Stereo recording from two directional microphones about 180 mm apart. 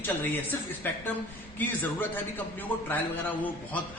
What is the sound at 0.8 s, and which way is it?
A man's voice, 10° left (ahead or behind).